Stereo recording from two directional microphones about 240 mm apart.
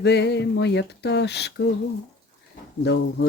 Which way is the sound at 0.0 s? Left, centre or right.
Left.